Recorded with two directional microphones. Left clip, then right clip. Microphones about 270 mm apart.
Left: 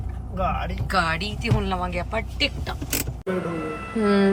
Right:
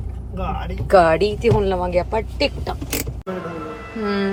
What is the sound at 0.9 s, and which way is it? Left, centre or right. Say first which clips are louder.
Speech: right 10 dB; centre.